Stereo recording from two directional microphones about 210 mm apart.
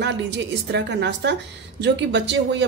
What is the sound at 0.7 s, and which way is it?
Speech, 55° right (ahead or behind).